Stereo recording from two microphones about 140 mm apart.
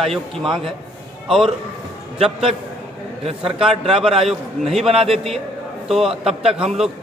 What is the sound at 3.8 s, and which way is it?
Speech, 45° right (ahead or behind).